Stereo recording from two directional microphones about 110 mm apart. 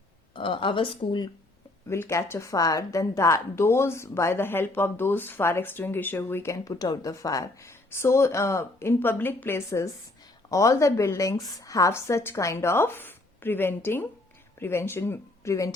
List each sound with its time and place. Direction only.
0.3 s speech: 50° left (ahead or behind)
1.9 s a woman's voice: 25° left (ahead or behind)